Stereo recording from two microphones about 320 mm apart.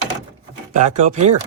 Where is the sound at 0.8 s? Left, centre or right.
Right.